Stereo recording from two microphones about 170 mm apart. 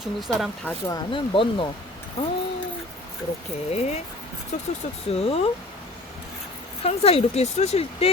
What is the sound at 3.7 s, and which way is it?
Speech, 40° left (ahead or behind).